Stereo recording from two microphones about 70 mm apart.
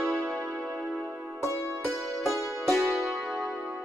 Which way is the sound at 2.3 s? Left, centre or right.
Centre.